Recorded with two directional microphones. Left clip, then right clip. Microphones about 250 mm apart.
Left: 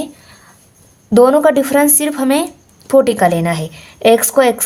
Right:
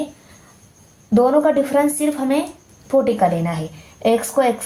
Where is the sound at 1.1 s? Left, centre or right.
Left.